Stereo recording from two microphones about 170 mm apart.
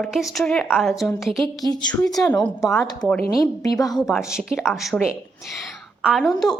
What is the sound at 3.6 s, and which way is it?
Speech, 20° left (ahead or behind).